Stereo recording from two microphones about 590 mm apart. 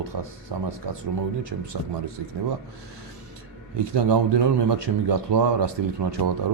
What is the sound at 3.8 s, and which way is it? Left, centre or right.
A man's voice, right.